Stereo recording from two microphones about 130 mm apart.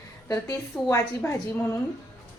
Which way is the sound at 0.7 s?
5° left (ahead or behind).